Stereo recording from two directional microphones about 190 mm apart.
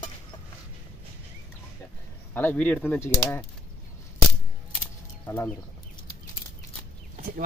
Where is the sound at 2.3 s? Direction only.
10° left (ahead or behind).